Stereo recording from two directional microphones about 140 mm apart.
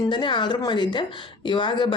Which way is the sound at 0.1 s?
35° left (ahead or behind).